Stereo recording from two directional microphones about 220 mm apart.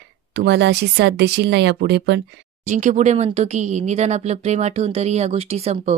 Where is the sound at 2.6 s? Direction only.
35° right (ahead or behind).